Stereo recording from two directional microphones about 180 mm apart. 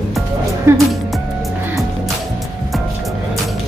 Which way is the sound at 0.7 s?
15° right (ahead or behind).